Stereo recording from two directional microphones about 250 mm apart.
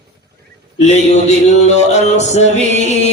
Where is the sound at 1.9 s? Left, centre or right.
Left.